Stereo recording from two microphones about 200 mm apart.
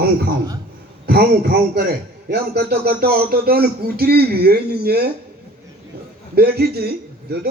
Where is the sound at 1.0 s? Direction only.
50° right (ahead or behind).